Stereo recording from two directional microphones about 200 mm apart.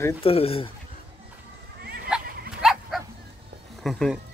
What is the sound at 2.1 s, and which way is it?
Dog, 5° right (ahead or behind).